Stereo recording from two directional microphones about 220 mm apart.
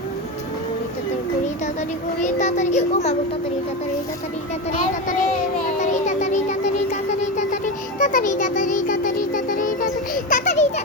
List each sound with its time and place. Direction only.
2.2 s music: 30° left (ahead or behind)
5.8 s music: 35° left (ahead or behind)